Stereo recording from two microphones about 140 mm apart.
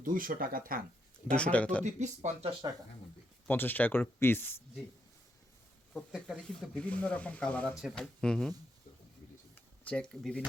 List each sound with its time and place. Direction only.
0.0 s speech: 80° right
1.4 s speech: 10° left (ahead or behind)
1.8 s speech: 55° right (ahead or behind)
3.4 s speech: 15° left (ahead or behind)
5.9 s speech: centre (ahead or behind)
7.8 s speech: centre (ahead or behind)
9.8 s speech: 5° left (ahead or behind)